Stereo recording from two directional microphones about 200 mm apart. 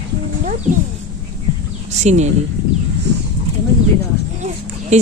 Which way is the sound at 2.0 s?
35° right (ahead or behind).